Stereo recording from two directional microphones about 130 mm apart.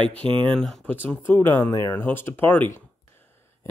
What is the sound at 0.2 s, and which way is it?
Speech, 40° right (ahead or behind).